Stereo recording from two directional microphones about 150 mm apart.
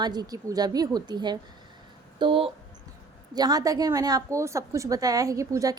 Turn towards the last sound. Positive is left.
turn(degrees=-20)  # may be behind; listen again after turning